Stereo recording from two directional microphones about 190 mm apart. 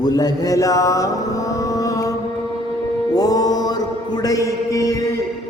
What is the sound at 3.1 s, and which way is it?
Music, 20° left (ahead or behind).